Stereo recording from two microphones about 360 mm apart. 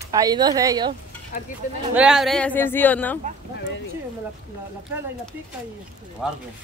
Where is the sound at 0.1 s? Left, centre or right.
Centre.